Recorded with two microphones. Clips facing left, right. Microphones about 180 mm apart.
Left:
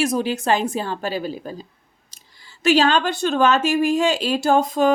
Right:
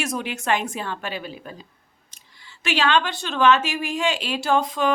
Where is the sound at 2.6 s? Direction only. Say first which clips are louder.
Left 5 dB; 40° left (ahead or behind).